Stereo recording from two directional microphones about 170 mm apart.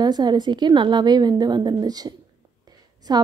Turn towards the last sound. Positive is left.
turn(degrees=-25)  # may be behind; listen again after turning